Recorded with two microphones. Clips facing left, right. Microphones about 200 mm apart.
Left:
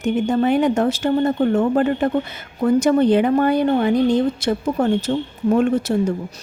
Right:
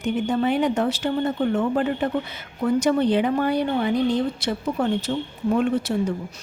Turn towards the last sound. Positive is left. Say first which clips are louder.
# left 4 dB
turn(degrees=45)  # may be behind; listen again after turning